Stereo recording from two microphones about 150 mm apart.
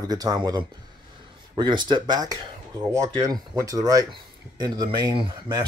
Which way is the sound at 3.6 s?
25° right (ahead or behind).